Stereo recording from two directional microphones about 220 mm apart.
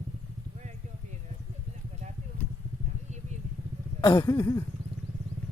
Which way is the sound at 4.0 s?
20° left (ahead or behind).